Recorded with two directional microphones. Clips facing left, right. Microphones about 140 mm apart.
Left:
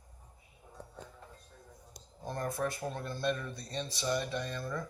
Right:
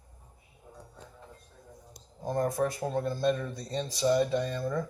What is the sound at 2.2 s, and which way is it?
A man's voice, 40° right (ahead or behind).